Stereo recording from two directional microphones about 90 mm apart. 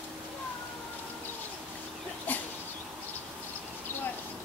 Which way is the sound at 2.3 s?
20° left (ahead or behind).